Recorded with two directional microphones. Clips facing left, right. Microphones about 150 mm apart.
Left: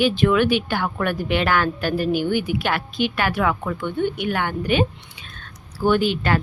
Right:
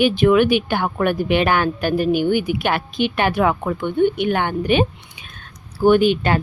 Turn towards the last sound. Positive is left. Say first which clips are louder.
# right 5 dB
turn(degrees=-20)  # may be behind; listen again after turning